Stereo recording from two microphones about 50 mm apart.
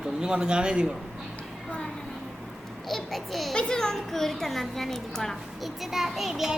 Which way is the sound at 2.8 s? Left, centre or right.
Centre.